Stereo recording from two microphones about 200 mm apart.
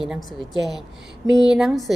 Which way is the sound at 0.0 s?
Centre (ahead or behind).